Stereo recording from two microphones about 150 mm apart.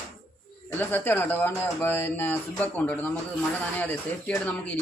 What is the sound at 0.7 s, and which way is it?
A man's voice, 15° left (ahead or behind).